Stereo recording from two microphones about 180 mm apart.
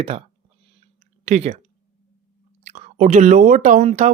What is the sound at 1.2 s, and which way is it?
Speech, 35° right (ahead or behind).